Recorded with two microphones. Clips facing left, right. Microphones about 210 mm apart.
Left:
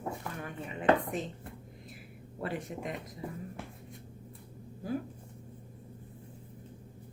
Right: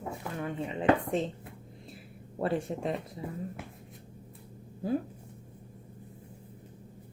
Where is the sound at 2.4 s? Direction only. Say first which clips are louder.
Right 6 dB; 30° right (ahead or behind).